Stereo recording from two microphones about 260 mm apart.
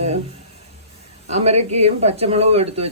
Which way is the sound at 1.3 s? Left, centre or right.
Right.